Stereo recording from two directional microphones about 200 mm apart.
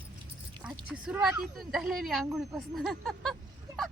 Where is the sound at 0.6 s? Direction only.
5° right (ahead or behind).